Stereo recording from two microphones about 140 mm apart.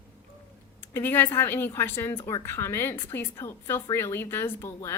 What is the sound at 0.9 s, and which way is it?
A woman's voice, 15° left (ahead or behind).